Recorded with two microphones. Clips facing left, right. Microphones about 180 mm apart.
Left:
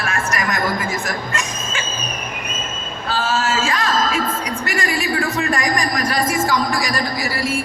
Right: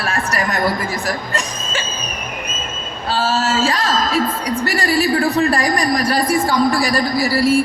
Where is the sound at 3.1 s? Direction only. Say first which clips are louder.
Right 2 dB; 35° right (ahead or behind).